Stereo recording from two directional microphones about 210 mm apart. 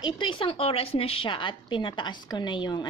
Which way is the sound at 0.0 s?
25° left (ahead or behind).